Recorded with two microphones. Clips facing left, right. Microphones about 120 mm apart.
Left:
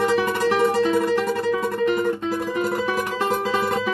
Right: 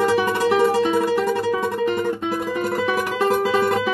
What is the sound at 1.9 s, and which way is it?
Music, centre (ahead or behind).